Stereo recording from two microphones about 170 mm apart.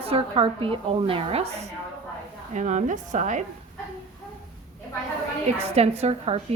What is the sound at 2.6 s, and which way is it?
Speech, 45° right (ahead or behind).